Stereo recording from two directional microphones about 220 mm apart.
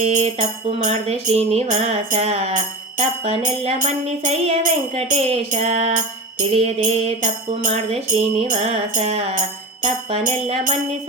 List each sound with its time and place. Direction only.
0.0 s music: 30° right (ahead or behind)
10.4 s music: 30° right (ahead or behind)